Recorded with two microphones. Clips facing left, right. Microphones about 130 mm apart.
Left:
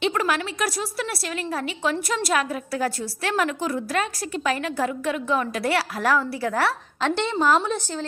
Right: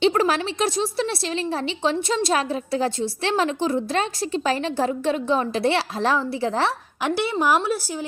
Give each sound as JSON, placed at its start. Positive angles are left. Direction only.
{"t": 0.0, "sound": "a woman's voice", "side_deg": -30}
{"t": 7.1, "sound": "speech", "side_deg": -10}